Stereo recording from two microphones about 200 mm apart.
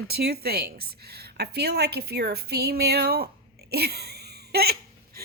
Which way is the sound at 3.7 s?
50° right (ahead or behind).